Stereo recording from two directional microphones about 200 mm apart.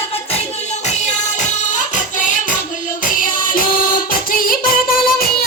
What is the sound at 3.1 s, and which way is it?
Child singing, 45° left (ahead or behind).